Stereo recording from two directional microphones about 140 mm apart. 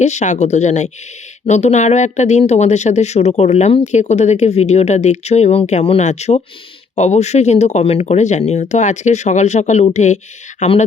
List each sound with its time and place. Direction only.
0.0 s speech: 55° left (ahead or behind)